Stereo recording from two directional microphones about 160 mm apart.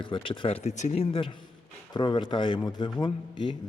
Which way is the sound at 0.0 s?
30° left (ahead or behind).